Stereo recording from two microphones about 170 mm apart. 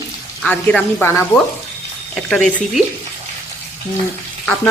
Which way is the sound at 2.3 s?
Centre (ahead or behind).